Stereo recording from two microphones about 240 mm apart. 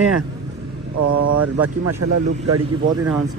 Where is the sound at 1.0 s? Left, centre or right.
Right.